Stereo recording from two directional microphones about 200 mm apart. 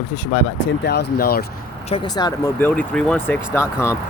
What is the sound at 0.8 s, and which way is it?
Speech, 55° left (ahead or behind).